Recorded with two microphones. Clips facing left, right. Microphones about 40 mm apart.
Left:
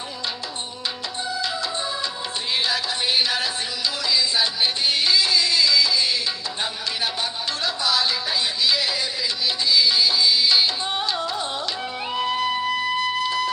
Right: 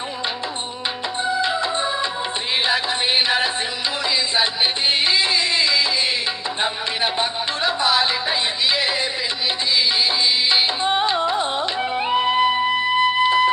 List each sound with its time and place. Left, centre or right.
1.2 s music: right
4.9 s music: right